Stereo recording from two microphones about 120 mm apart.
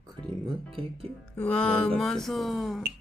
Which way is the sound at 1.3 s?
10° left (ahead or behind).